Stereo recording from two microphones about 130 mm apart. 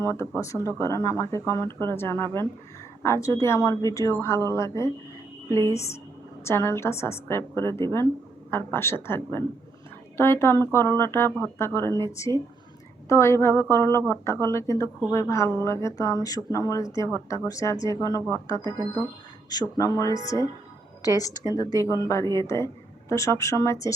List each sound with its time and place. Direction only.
0.0 s a woman's voice: 20° left (ahead or behind)